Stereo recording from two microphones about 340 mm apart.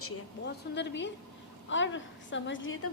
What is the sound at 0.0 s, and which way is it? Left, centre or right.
A woman's voice, left.